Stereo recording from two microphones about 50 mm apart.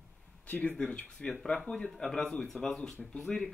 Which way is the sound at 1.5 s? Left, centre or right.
Centre.